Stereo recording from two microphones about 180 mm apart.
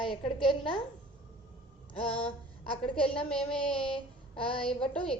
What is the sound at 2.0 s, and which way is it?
A woman's voice, 5° left (ahead or behind).